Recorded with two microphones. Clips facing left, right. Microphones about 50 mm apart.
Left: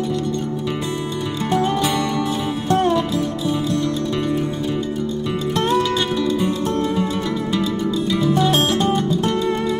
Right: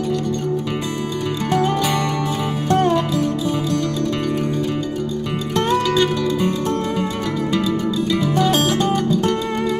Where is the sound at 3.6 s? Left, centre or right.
Left.